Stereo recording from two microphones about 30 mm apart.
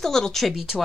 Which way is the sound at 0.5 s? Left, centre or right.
Centre.